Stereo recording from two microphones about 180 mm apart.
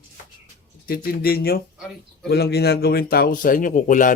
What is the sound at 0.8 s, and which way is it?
Speech, 55° left (ahead or behind).